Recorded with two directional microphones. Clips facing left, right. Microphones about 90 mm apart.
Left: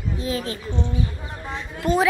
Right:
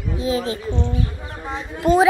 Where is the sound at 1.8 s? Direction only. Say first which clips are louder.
Right 5 dB; 30° right (ahead or behind).